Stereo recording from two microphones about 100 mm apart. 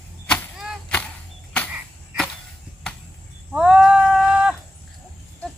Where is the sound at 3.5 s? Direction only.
10° right (ahead or behind).